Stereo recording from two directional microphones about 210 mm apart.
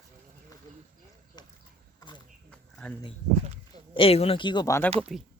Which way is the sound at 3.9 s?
25° left (ahead or behind).